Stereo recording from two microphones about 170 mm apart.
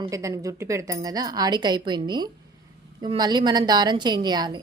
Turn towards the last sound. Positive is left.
turn(degrees=-25)  # may be behind; listen again after turning